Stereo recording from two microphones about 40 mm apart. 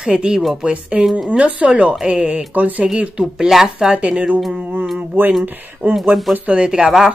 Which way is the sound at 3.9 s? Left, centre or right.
Right.